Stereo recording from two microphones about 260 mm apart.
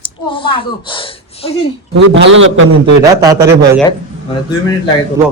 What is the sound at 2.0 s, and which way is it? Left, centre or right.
Speech, right.